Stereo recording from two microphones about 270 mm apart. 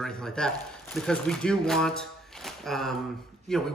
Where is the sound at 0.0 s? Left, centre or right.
Centre.